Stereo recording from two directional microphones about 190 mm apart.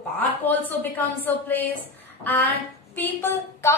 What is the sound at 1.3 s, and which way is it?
Speech, 10° left (ahead or behind).